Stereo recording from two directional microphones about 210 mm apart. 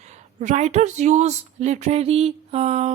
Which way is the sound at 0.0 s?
35° right (ahead or behind).